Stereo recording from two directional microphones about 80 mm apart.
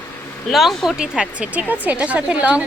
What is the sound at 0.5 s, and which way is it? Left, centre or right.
Speech, centre.